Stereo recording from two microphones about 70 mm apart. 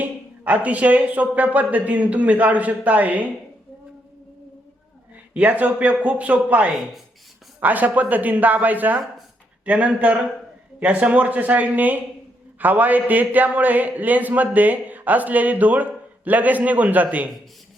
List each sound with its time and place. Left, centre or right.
0.0 s a man's voice: right
5.3 s a man's voice: right